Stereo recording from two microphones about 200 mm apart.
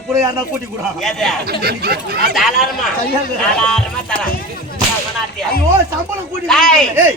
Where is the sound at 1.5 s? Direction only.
50° right (ahead or behind).